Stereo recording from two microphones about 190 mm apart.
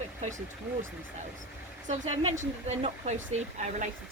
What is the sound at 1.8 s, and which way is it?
Speech, 35° right (ahead or behind).